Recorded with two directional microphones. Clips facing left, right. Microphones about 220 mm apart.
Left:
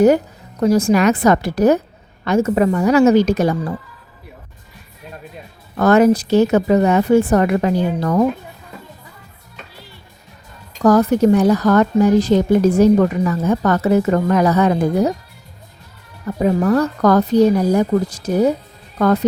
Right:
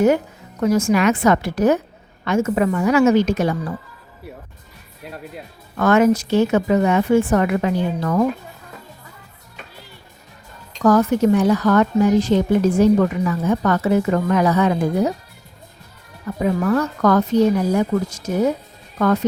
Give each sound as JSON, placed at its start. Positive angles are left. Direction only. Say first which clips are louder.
{"t": 0.6, "sound": "speech", "louder": "left 3 dB", "side_deg": 35}
{"t": 5.7, "sound": "speech", "louder": "left 3 dB", "side_deg": 35}
{"t": 10.8, "sound": "speech", "louder": "left 2 dB", "side_deg": 35}
{"t": 16.2, "sound": "speech", "louder": "left 3 dB", "side_deg": 35}